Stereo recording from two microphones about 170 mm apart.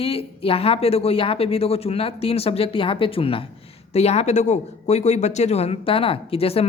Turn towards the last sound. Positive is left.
turn(degrees=35)  # may be behind; listen again after turning